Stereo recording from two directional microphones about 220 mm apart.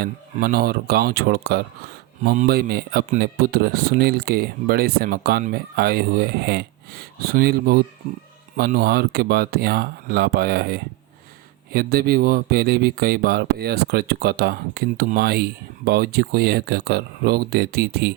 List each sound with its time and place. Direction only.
0.0 s speech: 45° right (ahead or behind)